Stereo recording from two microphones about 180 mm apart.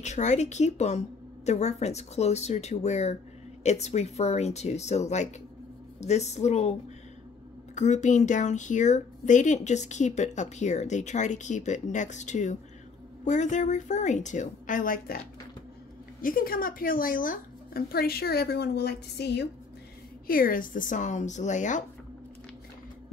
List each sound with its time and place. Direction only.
0.0 s speech: 40° left (ahead or behind)
7.7 s a woman's voice: 40° left (ahead or behind); by 19.4 s 65° left (ahead or behind)
20.2 s a woman's voice: 50° left (ahead or behind)